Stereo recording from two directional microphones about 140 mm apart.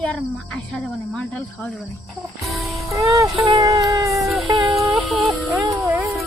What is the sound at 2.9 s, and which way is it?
Music, 25° right (ahead or behind).